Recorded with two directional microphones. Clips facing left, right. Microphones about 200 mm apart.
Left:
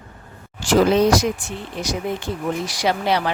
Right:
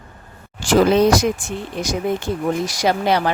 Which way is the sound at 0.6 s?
50° right (ahead or behind).